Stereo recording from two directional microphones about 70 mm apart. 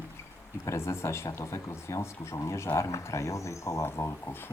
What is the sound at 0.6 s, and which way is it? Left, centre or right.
Speech, left.